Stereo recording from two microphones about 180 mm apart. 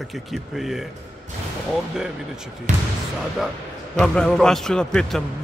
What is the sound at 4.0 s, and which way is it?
Speech, 5° left (ahead or behind).